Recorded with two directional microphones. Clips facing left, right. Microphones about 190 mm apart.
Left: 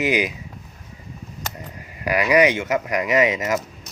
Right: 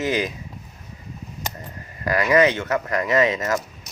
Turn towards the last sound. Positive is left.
turn(degrees=15)  # may be behind; listen again after turning